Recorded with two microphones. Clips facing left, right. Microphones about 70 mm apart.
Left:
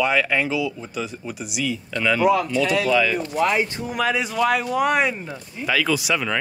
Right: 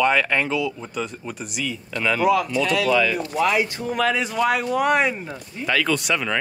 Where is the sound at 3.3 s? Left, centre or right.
Left.